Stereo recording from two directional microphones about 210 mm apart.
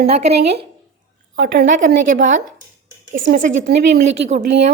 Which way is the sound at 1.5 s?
45° right (ahead or behind).